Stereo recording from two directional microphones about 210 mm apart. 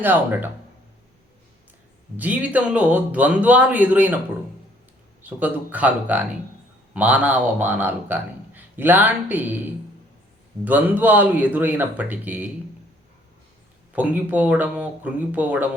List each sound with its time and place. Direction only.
0.0 s a man's voice: 10° right (ahead or behind)
2.1 s a man's voice: 5° right (ahead or behind)
5.2 s a man's voice: 10° right (ahead or behind)
13.9 s a man's voice: 5° right (ahead or behind)